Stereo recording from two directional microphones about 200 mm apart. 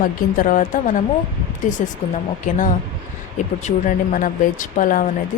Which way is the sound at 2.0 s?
40° left (ahead or behind).